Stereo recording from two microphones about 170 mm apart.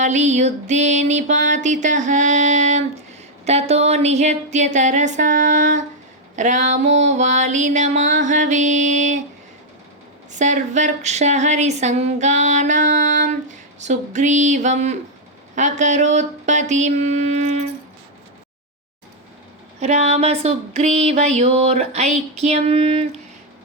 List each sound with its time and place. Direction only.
0.0 s speech: 45° right (ahead or behind)
10.3 s speech: 45° right (ahead or behind)
19.8 s a sound: 40° right (ahead or behind)